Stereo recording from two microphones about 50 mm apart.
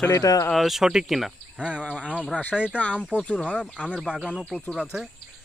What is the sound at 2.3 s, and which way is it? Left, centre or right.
Speech, left.